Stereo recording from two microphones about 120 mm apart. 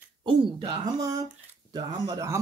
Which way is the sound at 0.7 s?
30° right (ahead or behind).